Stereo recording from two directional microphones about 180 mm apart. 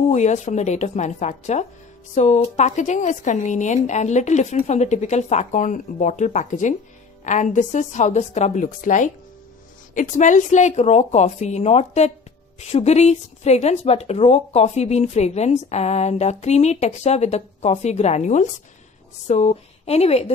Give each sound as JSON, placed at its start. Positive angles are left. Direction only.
{"t": 0.1, "sound": "speech", "side_deg": 40}